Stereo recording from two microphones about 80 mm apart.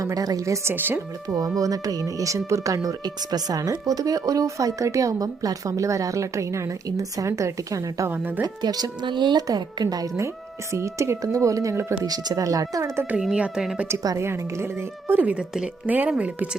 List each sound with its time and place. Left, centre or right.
0.0 s a woman's voice: right
1.3 s speech: right
8.1 s speech: right
8.6 s speech: right
9.0 s speech: right
9.5 s speech: right
10.2 s speech: right
12.0 s speech: right
13.3 s speech: centre
14.2 s a woman's voice: right; by 16.5 s centre